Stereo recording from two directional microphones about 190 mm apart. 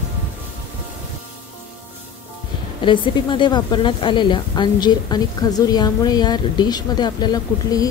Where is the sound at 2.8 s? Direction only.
25° left (ahead or behind).